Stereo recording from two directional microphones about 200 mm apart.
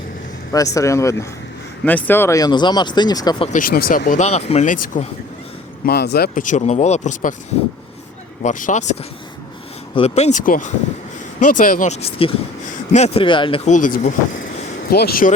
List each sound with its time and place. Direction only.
0.5 s speech: 15° left (ahead or behind)
3.5 s speech: 45° left (ahead or behind)
5.8 s speech: 55° left (ahead or behind)
8.4 s speech: 40° left (ahead or behind)
13.7 s speech: 40° left (ahead or behind)
14.8 s speech: 50° left (ahead or behind)